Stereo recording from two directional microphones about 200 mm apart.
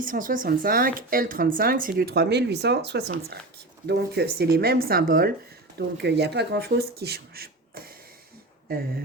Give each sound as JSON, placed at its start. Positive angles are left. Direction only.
{"t": 0.0, "sound": "speech", "side_deg": -40}